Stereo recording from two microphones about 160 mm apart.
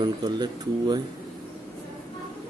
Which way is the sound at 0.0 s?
25° right (ahead or behind).